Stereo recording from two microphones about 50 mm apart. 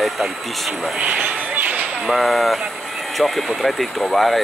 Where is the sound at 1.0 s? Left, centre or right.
Right.